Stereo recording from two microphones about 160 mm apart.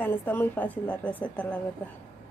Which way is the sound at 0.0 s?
10° left (ahead or behind).